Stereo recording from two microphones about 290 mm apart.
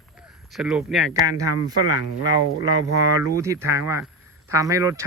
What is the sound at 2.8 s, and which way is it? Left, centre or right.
Speech, right.